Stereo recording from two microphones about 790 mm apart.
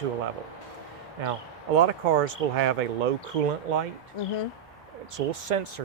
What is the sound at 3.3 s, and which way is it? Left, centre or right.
Speech, right.